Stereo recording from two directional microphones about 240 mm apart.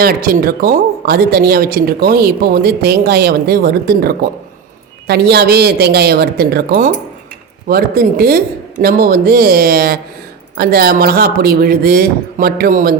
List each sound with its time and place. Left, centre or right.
0.0 s speech: right